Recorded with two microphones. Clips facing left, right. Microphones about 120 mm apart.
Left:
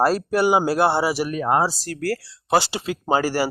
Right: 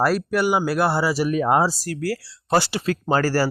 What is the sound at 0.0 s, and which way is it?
Speech, 25° left (ahead or behind).